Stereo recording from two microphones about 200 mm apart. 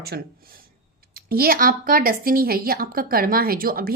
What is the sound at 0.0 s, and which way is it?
A woman's voice, 50° right (ahead or behind).